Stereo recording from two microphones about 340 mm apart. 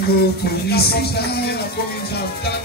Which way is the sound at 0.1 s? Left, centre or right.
Left.